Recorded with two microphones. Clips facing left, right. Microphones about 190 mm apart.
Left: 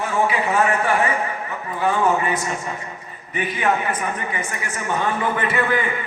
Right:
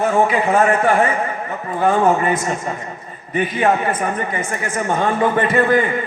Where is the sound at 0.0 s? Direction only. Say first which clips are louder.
Right 5 dB; 50° right (ahead or behind).